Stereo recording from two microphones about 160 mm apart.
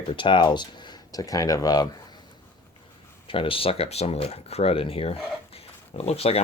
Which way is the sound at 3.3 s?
35° left (ahead or behind).